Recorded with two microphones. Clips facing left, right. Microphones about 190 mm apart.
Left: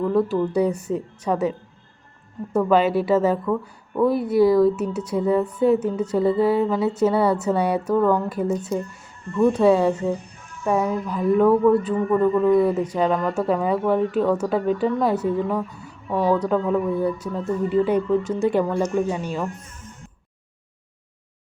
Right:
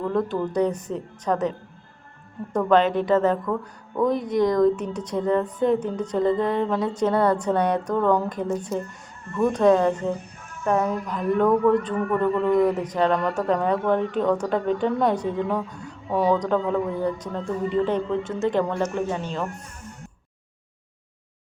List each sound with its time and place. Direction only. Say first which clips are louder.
0.0 s a woman's voice: left 4 dB; 5° left (ahead or behind)
10.3 s a sound: right 1 dB; 55° right (ahead or behind)
10.6 s a woman's voice: left 1 dB; 10° left (ahead or behind)
11.9 s a man's voice: left 3 dB; 20° left (ahead or behind)
12.8 s a woman's voice: left 1 dB; 10° left (ahead or behind)